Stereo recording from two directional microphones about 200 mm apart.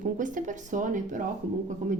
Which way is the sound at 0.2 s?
40° right (ahead or behind).